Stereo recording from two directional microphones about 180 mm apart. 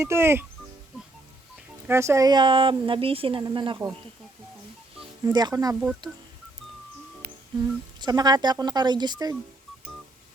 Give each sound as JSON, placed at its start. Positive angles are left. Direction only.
{"t": 0.0, "sound": "speech", "side_deg": -15}
{"t": 1.9, "sound": "speech", "side_deg": -15}
{"t": 5.2, "sound": "speech", "side_deg": -20}
{"t": 7.9, "sound": "speech", "side_deg": -25}